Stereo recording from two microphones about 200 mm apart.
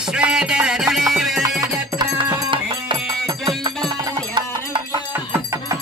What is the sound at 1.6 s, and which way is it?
Music, 20° right (ahead or behind).